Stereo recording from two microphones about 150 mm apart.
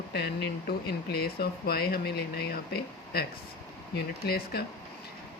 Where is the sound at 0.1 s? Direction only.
90° left.